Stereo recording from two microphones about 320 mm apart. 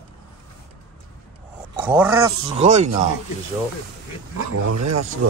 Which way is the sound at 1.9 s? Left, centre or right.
Centre.